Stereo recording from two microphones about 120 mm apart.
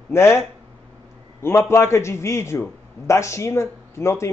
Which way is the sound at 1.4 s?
20° left (ahead or behind).